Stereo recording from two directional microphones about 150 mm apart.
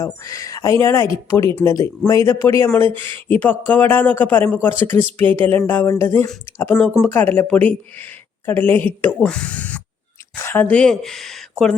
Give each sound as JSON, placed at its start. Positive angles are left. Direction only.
{"t": 0.0, "sound": "a man's voice", "side_deg": 20}